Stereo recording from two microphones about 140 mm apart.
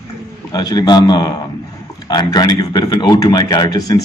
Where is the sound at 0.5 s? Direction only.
30° left (ahead or behind).